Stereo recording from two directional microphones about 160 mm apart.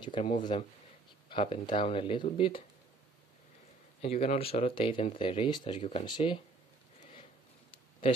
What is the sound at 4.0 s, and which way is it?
Speech, 40° left (ahead or behind).